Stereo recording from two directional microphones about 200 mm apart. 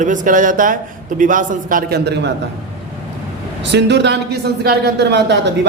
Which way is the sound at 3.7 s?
60° right (ahead or behind).